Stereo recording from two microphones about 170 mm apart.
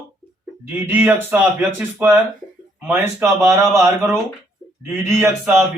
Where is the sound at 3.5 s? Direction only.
15° right (ahead or behind).